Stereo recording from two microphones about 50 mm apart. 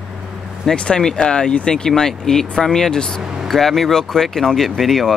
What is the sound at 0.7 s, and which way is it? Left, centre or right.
Speech, centre.